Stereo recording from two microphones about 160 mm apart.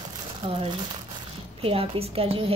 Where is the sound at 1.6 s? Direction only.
35° right (ahead or behind).